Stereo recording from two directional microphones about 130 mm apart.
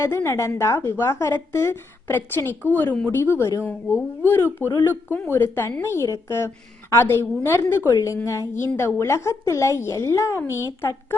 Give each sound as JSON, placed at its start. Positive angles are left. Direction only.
{"t": 0.0, "sound": "a woman's voice", "side_deg": 20}